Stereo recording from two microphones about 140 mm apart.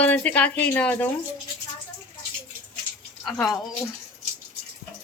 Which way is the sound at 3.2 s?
5° left (ahead or behind).